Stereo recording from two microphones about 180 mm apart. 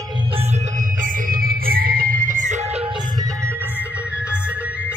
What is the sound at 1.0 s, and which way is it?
Music, 55° right (ahead or behind).